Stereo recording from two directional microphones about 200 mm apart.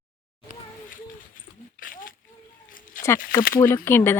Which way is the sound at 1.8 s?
45° left (ahead or behind).